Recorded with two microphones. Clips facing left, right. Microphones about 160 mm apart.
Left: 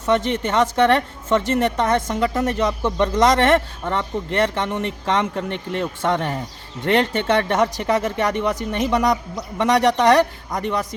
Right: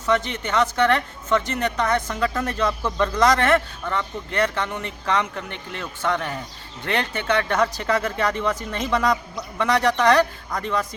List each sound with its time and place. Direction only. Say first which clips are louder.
0.0 s a woman's voice: left 4 dB; 30° left (ahead or behind)